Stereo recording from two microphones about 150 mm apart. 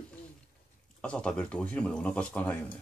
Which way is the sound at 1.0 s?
5° left (ahead or behind).